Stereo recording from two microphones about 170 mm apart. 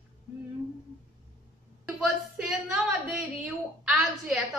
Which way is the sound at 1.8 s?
5° right (ahead or behind).